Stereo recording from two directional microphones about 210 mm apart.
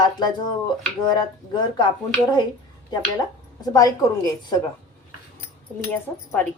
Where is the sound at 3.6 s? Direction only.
15° left (ahead or behind).